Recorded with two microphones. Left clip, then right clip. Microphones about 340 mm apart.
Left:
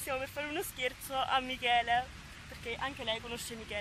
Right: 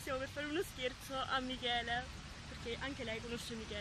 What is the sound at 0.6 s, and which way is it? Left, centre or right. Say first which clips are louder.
Speech: left 3 dB; centre.